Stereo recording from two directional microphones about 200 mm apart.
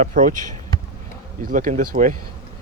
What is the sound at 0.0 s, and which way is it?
Speech, 40° right (ahead or behind).